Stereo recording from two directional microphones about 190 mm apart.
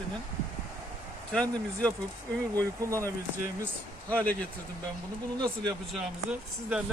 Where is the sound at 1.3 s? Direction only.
5° left (ahead or behind).